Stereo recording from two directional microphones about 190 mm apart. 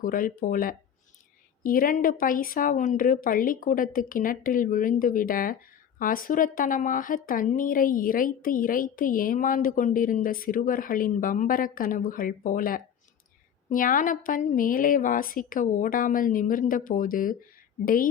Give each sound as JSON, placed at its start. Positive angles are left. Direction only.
{"t": 0.0, "sound": "a woman's voice", "side_deg": 45}